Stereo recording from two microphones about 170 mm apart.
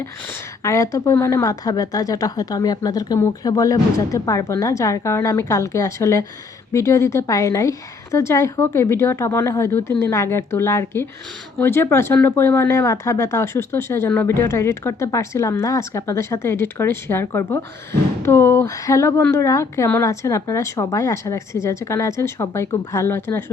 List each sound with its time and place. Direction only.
0.6 s speech: 20° left (ahead or behind)